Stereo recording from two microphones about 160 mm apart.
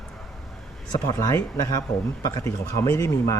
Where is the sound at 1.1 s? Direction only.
20° left (ahead or behind).